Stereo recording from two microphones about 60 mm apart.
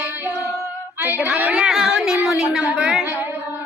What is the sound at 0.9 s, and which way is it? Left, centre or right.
Female singing, right.